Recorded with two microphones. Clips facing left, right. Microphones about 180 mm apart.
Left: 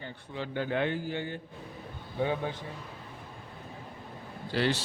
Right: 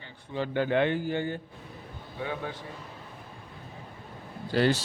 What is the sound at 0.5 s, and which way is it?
Speech, 70° right (ahead or behind).